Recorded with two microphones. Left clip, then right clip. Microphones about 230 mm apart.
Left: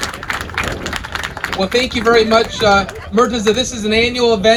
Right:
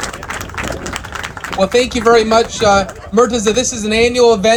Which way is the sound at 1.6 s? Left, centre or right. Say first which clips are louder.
Right 4 dB; right.